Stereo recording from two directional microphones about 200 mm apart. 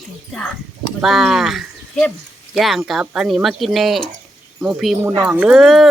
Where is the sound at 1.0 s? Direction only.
Centre (ahead or behind).